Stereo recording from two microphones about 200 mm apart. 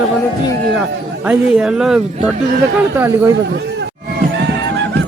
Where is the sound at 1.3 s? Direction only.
5° right (ahead or behind).